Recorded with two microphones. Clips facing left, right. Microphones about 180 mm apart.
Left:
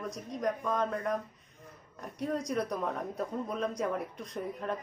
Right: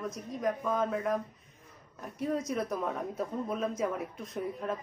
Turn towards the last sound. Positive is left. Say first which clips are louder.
# right 1 dB
turn(degrees=0)  # may be behind; listen again after turning